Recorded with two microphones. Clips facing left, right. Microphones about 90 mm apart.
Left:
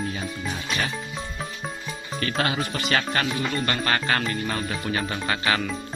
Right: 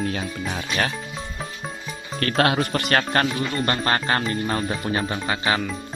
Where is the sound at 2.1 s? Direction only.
55° right (ahead or behind).